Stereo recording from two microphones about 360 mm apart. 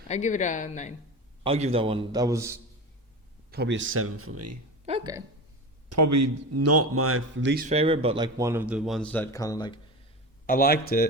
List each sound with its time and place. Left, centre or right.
0.1 s speech: centre
1.5 s speech: centre
3.5 s speech: right
4.9 s speech: centre
5.9 s speech: right; by 9.8 s centre
10.4 s speech: left